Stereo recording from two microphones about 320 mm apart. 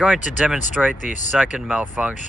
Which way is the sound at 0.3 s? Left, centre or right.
Centre.